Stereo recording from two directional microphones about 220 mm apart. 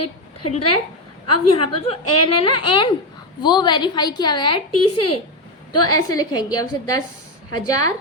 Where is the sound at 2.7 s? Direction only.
20° left (ahead or behind).